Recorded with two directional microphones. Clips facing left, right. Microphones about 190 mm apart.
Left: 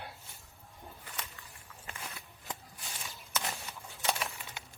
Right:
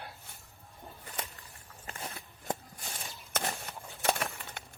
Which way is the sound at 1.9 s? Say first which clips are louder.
Right 3 dB; 40° right (ahead or behind).